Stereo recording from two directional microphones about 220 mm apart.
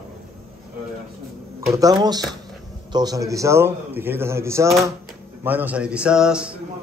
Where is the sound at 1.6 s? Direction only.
15° right (ahead or behind).